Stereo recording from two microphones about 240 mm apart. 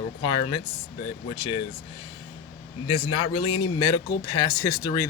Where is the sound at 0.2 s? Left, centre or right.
Centre.